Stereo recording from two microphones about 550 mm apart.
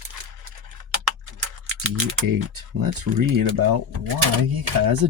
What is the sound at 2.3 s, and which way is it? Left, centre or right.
Speech, right.